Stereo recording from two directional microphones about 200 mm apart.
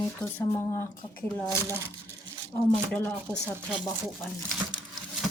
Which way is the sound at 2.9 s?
5° left (ahead or behind).